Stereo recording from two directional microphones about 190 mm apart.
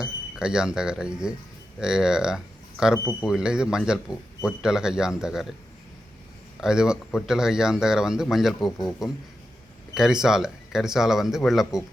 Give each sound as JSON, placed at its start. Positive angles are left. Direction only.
{"t": 0.0, "sound": "speech", "side_deg": -5}
{"t": 2.9, "sound": "speech", "side_deg": 15}
{"t": 3.2, "sound": "speech", "side_deg": -5}
{"t": 6.6, "sound": "speech", "side_deg": -5}